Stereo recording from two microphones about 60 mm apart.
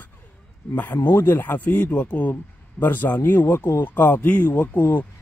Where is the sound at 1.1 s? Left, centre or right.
Left.